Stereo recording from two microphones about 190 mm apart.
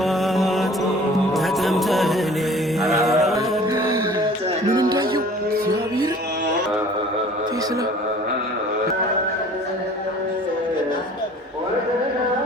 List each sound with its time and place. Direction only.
0.0 s mantra: centre (ahead or behind)
1.3 s music: centre (ahead or behind)
2.8 s mantra: centre (ahead or behind)
3.3 s music: 15° right (ahead or behind)